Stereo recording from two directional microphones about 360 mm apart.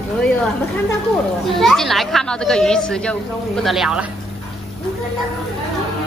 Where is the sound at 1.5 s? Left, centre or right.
Centre.